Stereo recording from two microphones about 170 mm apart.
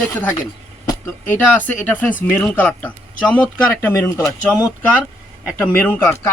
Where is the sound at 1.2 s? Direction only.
10° left (ahead or behind).